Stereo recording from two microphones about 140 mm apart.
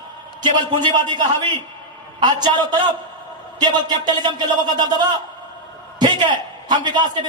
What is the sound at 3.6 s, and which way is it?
A man's voice, 30° right (ahead or behind).